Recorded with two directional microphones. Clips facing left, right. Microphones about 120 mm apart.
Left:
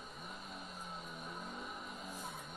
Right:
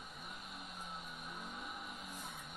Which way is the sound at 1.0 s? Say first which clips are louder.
Left 2 dB; 35° left (ahead or behind).